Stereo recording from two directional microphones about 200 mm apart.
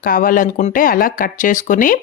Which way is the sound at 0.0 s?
45° left (ahead or behind).